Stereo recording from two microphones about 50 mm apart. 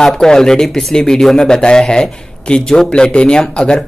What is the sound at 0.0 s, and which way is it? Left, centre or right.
Speech, centre.